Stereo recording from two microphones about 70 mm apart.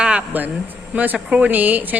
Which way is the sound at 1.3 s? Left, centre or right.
Right.